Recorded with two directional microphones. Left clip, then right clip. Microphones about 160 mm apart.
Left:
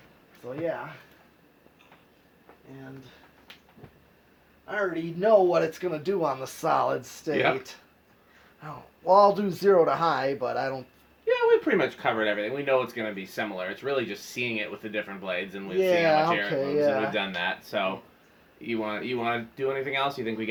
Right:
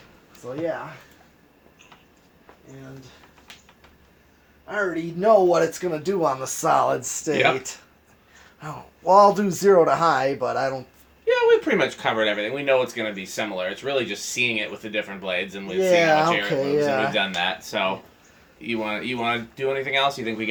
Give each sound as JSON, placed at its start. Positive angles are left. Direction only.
{"t": 0.4, "sound": "speech", "side_deg": -20}
{"t": 5.2, "sound": "a man's voice", "side_deg": -25}
{"t": 11.3, "sound": "speech", "side_deg": 30}
{"t": 15.8, "sound": "speech", "side_deg": -25}
{"t": 16.6, "sound": "speech", "side_deg": -45}
{"t": 17.1, "sound": "speech", "side_deg": 25}